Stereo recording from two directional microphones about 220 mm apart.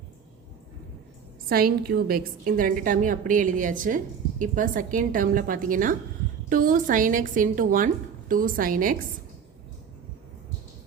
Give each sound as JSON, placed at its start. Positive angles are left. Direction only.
{"t": 1.5, "sound": "a woman's voice", "side_deg": -45}